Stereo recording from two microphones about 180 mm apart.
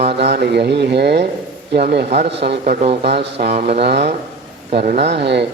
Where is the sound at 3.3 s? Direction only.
40° right (ahead or behind).